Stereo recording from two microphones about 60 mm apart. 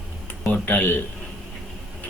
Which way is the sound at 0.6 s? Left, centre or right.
Left.